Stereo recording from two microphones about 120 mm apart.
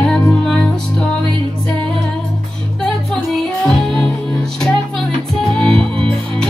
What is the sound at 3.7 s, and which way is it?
Music, 5° left (ahead or behind).